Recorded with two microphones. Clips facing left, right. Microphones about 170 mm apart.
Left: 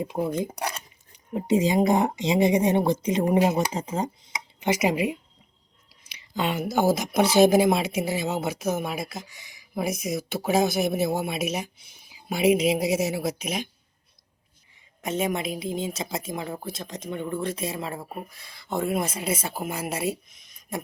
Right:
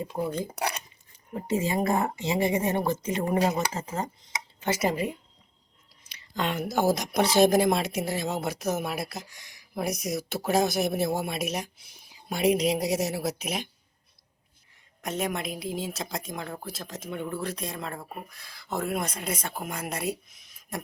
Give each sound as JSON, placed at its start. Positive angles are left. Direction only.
{"t": 0.0, "sound": "speech", "side_deg": 15}
{"t": 15.0, "sound": "speech", "side_deg": 0}